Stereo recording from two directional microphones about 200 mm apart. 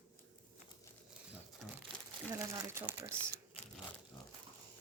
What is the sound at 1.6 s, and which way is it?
Crumpling, centre (ahead or behind).